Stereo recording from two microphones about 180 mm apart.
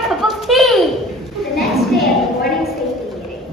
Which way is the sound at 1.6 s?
Centre (ahead or behind).